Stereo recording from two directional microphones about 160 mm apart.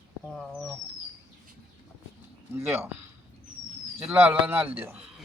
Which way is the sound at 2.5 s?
15° right (ahead or behind).